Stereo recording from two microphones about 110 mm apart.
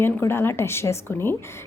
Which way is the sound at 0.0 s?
20° left (ahead or behind).